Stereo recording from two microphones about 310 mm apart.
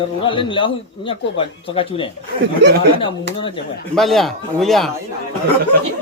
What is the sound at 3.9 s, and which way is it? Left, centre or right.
Speech, centre.